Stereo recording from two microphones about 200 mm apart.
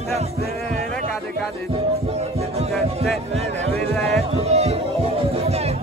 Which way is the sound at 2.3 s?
30° right (ahead or behind).